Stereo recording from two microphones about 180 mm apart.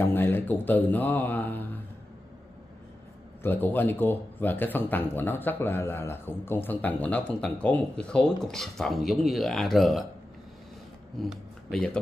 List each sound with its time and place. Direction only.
0.0 s speech: 10° left (ahead or behind)
3.4 s speech: 10° left (ahead or behind)
11.1 s speech: centre (ahead or behind)